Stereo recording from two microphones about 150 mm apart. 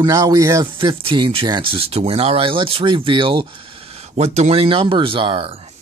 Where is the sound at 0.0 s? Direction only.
25° right (ahead or behind).